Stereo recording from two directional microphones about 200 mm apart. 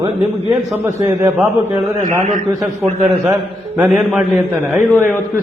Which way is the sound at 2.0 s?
35° right (ahead or behind).